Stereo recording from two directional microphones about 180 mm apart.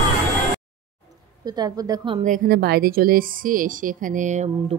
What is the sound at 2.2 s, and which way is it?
A woman's voice, 55° right (ahead or behind).